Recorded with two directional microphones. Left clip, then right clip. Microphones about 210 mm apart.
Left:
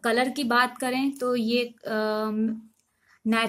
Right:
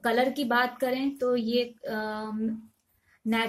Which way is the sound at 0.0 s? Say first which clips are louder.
Left 1 dB; 50° left (ahead or behind).